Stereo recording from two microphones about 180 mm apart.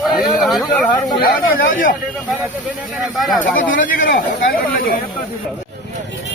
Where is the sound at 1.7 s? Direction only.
50° left (ahead or behind).